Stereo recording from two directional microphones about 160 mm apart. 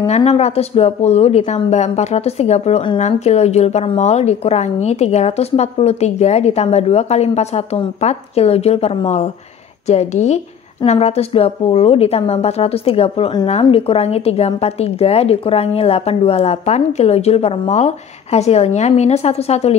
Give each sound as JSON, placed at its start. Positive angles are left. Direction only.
{"t": 0.0, "sound": "a woman's voice", "side_deg": 40}